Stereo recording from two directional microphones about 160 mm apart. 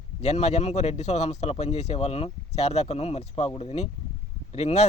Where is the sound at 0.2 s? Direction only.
45° left (ahead or behind).